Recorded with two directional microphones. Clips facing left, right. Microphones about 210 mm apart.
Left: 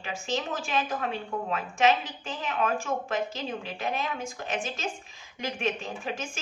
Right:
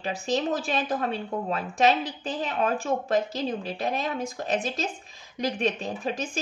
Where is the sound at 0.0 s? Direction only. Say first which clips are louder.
Right 5 dB; 35° right (ahead or behind).